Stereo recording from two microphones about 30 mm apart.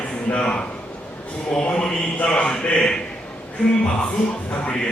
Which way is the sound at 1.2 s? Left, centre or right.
Left.